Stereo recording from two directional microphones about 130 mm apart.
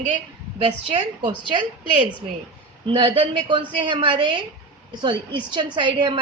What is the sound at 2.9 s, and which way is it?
A woman's voice, 40° right (ahead or behind).